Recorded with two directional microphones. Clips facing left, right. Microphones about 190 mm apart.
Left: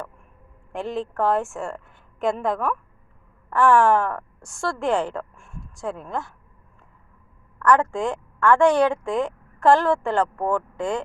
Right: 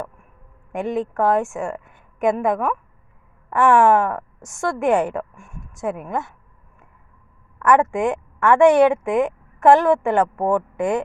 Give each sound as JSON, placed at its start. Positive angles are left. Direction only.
{"t": 0.7, "sound": "a woman's voice", "side_deg": -15}
{"t": 7.6, "sound": "a woman's voice", "side_deg": -20}